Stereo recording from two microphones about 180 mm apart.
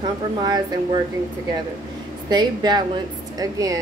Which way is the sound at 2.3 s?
20° right (ahead or behind).